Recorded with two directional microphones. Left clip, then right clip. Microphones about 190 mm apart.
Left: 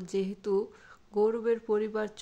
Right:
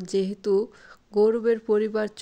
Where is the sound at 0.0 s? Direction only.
30° right (ahead or behind).